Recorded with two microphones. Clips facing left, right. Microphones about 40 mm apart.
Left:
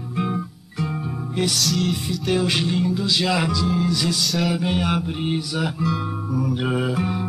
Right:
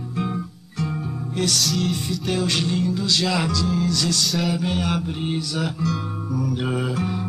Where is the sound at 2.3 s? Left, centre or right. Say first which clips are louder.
Left 2 dB; centre.